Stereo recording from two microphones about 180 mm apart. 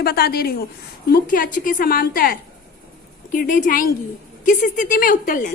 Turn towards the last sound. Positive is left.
turn(degrees=50)  # may be behind; listen again after turning